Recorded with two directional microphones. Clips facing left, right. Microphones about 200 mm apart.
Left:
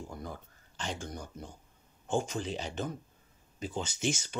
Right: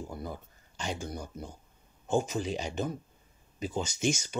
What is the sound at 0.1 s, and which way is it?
Speech, 10° right (ahead or behind).